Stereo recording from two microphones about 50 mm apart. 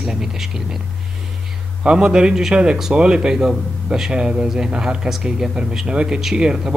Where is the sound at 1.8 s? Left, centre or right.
Centre.